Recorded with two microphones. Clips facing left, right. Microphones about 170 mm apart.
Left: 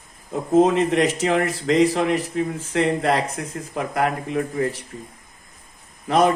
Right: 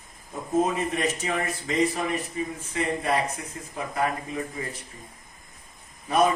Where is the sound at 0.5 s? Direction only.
90° left; by 4.8 s 70° left (ahead or behind).